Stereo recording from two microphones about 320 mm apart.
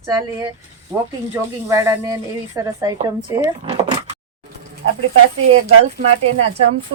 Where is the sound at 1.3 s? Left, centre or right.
Centre.